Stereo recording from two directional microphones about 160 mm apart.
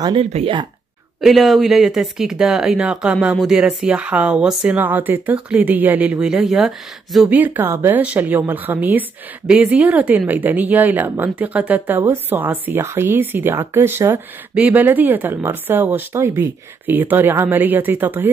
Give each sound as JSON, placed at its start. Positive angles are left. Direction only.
{"t": 0.0, "sound": "speech", "side_deg": -35}
{"t": 1.2, "sound": "speech", "side_deg": 0}